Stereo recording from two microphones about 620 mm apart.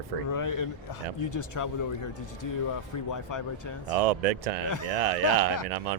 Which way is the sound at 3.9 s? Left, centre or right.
Right.